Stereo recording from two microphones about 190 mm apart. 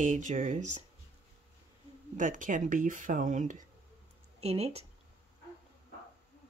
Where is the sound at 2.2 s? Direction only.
45° right (ahead or behind).